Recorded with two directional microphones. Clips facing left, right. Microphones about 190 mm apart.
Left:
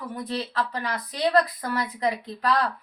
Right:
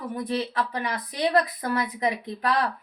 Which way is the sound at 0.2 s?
20° right (ahead or behind).